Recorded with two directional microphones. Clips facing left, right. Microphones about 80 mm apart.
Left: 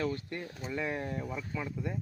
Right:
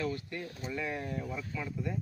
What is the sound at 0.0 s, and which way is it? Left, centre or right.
Speech, left.